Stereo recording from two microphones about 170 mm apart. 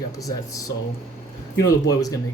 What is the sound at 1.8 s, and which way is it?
Speech, 20° left (ahead or behind).